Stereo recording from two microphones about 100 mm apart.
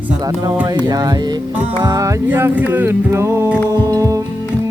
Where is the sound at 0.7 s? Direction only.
40° right (ahead or behind).